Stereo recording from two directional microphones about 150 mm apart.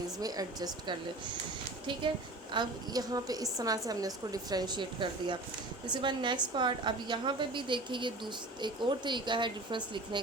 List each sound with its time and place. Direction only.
0.2 s a woman's voice: 25° right (ahead or behind)
2.5 s a woman's voice: 30° right (ahead or behind)